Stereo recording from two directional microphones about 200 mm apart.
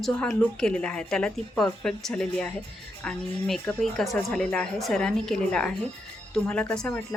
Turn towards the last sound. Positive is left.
turn(degrees=5)  # may be behind; listen again after turning